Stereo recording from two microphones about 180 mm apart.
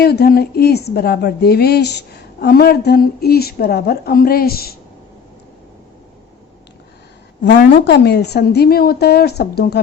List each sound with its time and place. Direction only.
0.0 s a woman's voice: 60° left (ahead or behind)
7.4 s a woman's voice: 65° left (ahead or behind)